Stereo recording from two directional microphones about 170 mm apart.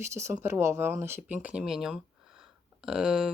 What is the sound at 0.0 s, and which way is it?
Speech, 15° right (ahead or behind).